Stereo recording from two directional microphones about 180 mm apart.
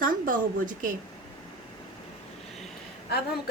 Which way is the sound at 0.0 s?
50° right (ahead or behind).